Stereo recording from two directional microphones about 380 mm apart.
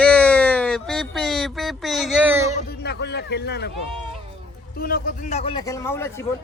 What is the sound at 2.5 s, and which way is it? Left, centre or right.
A man's voice, left.